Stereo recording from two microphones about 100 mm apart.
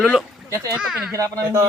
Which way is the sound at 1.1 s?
35° right (ahead or behind).